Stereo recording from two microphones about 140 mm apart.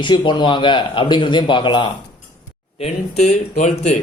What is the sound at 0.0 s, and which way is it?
Speech, 35° left (ahead or behind).